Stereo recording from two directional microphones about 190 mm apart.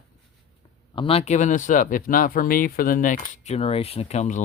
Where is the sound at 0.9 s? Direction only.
30° left (ahead or behind).